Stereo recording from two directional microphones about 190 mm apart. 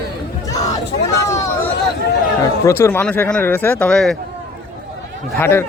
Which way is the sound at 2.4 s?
15° left (ahead or behind).